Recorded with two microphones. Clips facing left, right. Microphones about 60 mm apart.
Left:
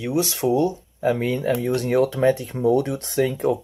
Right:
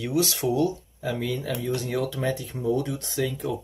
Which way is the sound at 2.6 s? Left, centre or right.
Left.